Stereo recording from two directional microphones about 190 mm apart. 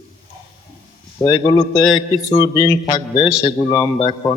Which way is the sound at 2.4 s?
20° left (ahead or behind).